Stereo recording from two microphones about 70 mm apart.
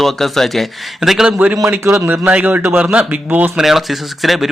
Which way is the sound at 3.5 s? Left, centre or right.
Centre.